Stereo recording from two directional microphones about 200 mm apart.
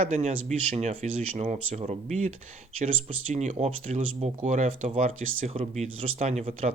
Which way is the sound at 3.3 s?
35° right (ahead or behind).